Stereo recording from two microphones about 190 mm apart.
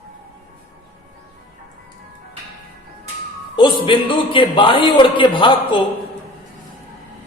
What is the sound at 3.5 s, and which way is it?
A man's voice, 25° left (ahead or behind).